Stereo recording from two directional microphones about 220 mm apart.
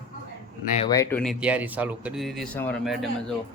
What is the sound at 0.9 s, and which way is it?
Speech, 15° left (ahead or behind).